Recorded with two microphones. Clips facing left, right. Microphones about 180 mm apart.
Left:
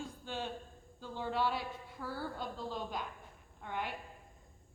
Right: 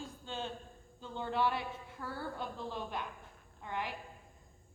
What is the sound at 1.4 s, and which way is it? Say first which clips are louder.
Speech: right 2 dB; 60° right (ahead or behind).